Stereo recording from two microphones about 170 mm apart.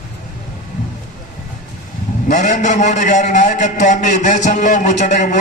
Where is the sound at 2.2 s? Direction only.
45° left (ahead or behind).